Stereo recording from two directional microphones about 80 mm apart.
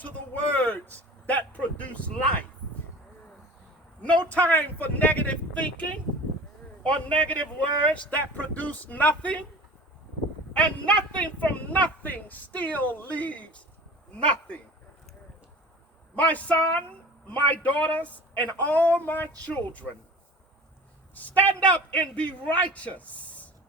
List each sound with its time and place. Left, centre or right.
0.0 s a sound: left
4.2 s speech: centre
6.8 s speech: centre
10.5 s speech: centre
16.1 s speech: centre
21.2 s a man's voice: centre